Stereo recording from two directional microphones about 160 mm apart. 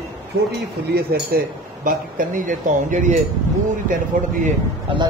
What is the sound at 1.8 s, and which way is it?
Speech, 55° right (ahead or behind).